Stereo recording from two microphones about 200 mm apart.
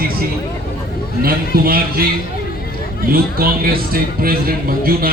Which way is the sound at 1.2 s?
50° right (ahead or behind).